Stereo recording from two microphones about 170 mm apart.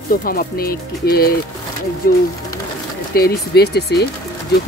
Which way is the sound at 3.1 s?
65° left (ahead or behind).